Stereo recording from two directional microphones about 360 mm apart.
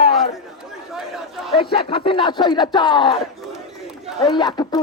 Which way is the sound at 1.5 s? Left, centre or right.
Centre.